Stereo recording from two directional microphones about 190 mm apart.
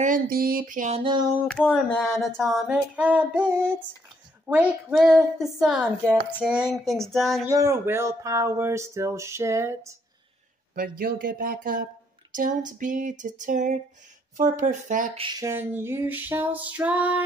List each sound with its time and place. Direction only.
0.0 s speech: 50° right (ahead or behind)
1.0 s a sound: 25° right (ahead or behind)
1.5 s a sound: 5° left (ahead or behind)
7.4 s speech: 15° right (ahead or behind)
10.7 s speech: 50° right (ahead or behind)
15.1 s speech: 20° right (ahead or behind); by 17.2 s 5° right (ahead or behind)